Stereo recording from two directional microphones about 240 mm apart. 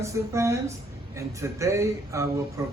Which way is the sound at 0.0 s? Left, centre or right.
Centre.